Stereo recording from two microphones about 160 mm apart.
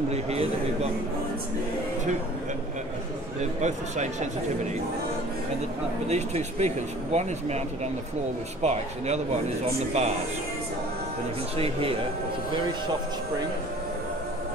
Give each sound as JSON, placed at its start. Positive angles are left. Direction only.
{"t": 0.1, "sound": "speech", "side_deg": -40}
{"t": 3.6, "sound": "speech", "side_deg": -45}
{"t": 6.0, "sound": "speech", "side_deg": -45}
{"t": 11.5, "sound": "speech", "side_deg": -35}